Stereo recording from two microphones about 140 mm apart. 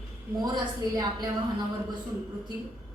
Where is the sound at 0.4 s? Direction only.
30° right (ahead or behind).